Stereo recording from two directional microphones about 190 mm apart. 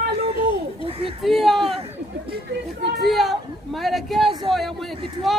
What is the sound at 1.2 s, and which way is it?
Speech, centre (ahead or behind).